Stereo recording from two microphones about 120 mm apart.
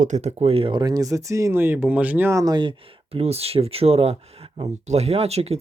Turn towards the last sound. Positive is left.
turn(degrees=-60)  # may be behind; listen again after turning